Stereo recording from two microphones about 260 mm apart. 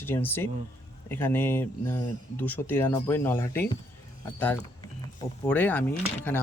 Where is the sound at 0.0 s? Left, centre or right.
Centre.